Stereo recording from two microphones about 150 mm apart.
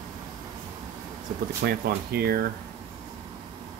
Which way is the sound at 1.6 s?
90° right.